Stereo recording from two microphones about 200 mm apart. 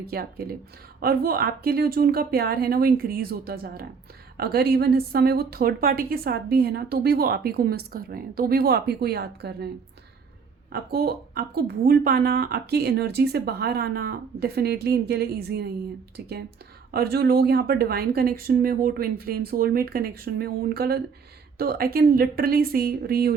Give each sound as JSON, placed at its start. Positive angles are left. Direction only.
{"t": 0.1, "sound": "a woman's voice", "side_deg": -50}
{"t": 10.7, "sound": "a woman's voice", "side_deg": -50}
{"t": 16.9, "sound": "a woman's voice", "side_deg": -50}